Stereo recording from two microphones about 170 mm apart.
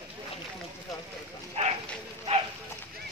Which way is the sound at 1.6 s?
35° right (ahead or behind).